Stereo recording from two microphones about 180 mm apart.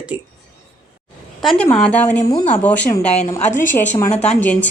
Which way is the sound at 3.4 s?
45° left (ahead or behind).